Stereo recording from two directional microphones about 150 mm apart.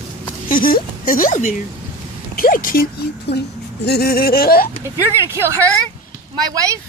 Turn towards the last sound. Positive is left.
turn(degrees=-20)  # may be behind; listen again after turning